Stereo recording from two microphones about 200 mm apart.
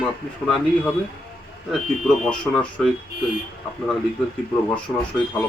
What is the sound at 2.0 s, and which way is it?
Speech, 5° left (ahead or behind).